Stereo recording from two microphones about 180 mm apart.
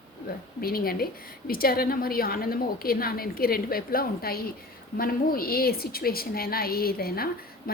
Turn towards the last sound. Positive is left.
turn(degrees=55)  # may be behind; listen again after turning